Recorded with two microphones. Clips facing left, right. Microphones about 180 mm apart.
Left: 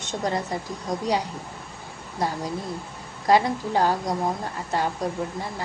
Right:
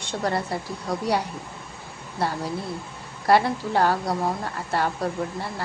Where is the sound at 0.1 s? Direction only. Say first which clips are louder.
Right 1 dB; 15° left (ahead or behind).